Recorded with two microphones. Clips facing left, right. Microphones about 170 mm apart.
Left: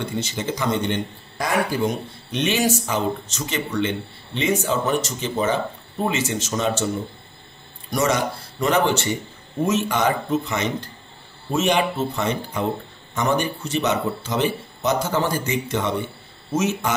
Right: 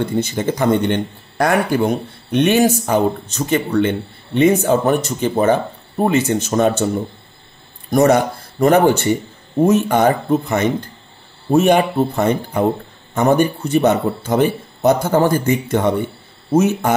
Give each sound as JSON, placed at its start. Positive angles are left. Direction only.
{"t": 0.0, "sound": "speech", "side_deg": -55}
{"t": 7.9, "sound": "a man's voice", "side_deg": -55}